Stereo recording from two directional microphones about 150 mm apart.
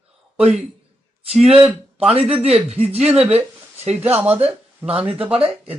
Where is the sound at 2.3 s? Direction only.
40° right (ahead or behind).